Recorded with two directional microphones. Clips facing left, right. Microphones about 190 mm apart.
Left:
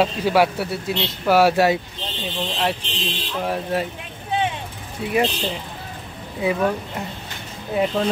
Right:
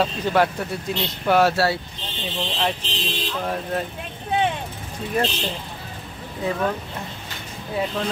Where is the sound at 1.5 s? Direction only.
15° left (ahead or behind).